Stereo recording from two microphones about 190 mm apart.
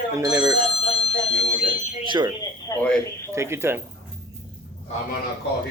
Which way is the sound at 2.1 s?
25° right (ahead or behind).